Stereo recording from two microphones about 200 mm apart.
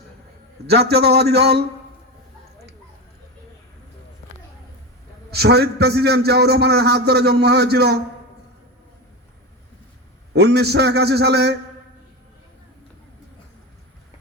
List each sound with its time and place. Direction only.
0.7 s a man's voice: 55° right (ahead or behind)
5.3 s a man's voice: 55° right (ahead or behind)
10.3 s a man's voice: 55° right (ahead or behind)